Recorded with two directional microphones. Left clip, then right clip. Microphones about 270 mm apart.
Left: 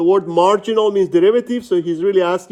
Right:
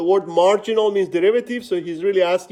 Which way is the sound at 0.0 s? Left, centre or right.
Centre.